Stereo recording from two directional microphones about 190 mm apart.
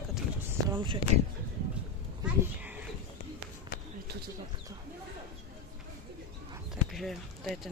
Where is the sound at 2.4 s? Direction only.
10° right (ahead or behind).